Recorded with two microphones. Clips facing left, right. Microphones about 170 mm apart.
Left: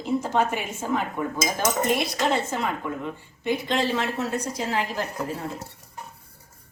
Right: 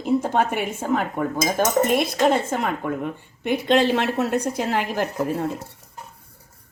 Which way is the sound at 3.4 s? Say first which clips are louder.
Right 6 dB; 65° right (ahead or behind).